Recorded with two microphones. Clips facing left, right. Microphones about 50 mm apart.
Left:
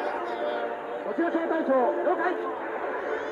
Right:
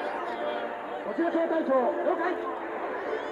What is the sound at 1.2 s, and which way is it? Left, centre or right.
A man's voice, centre.